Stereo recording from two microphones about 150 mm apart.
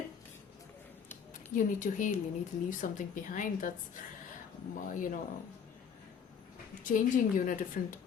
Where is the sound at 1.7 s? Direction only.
60° left (ahead or behind).